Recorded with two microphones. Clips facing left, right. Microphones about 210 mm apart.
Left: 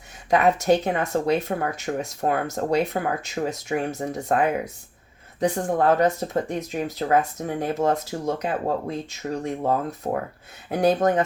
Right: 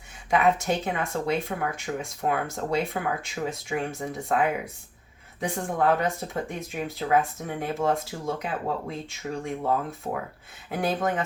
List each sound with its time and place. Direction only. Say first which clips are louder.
0.3 s speech: left 4 dB; 40° left (ahead or behind)